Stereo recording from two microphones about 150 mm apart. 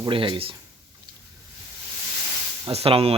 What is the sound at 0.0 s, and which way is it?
Speech, 35° right (ahead or behind).